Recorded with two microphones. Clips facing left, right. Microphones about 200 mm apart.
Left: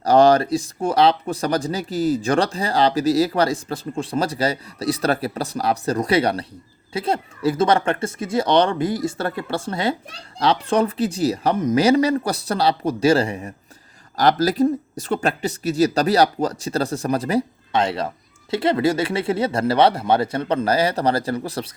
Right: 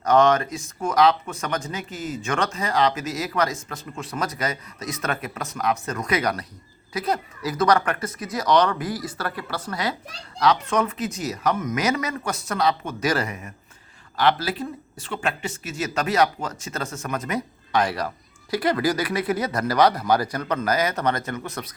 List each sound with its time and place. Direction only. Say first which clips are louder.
0.0 s speech: left 4 dB; 35° left (ahead or behind)